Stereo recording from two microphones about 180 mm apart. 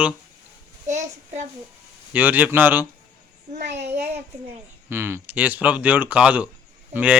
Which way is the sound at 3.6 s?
70° right (ahead or behind).